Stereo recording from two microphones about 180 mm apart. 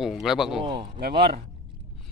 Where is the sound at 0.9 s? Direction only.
60° right (ahead or behind).